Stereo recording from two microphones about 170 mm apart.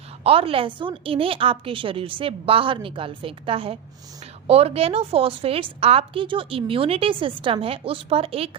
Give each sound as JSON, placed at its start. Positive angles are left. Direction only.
{"t": 0.2, "sound": "a woman's voice", "side_deg": -35}